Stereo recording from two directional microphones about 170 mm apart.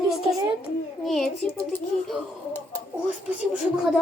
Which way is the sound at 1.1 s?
Centre (ahead or behind).